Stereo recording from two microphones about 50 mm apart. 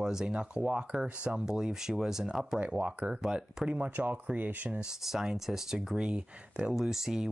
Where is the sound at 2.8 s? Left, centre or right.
Right.